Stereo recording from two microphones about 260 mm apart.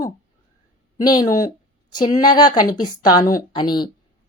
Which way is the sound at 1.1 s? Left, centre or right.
Centre.